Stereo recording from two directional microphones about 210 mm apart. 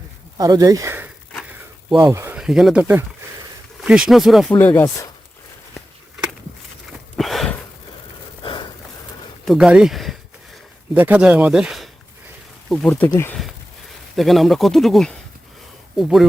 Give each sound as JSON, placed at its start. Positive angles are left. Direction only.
{"t": 0.3, "sound": "speech", "side_deg": -15}
{"t": 3.8, "sound": "speech", "side_deg": -5}
{"t": 4.5, "sound": "speech", "side_deg": 10}
{"t": 7.2, "sound": "a sound", "side_deg": 0}
{"t": 9.5, "sound": "speech", "side_deg": -5}